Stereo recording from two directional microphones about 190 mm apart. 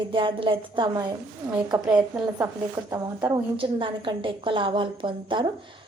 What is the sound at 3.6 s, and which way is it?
A woman's voice, 25° right (ahead or behind).